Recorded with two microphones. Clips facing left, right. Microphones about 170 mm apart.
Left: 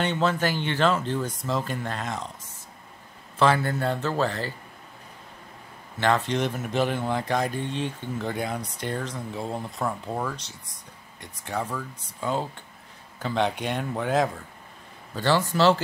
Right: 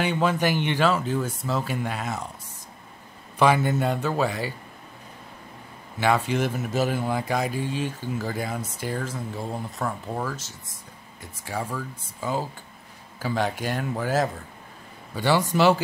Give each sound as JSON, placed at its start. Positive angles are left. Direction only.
{"t": 0.0, "sound": "speech", "side_deg": -10}
{"t": 5.9, "sound": "speech", "side_deg": -10}
{"t": 15.1, "sound": "speech", "side_deg": -15}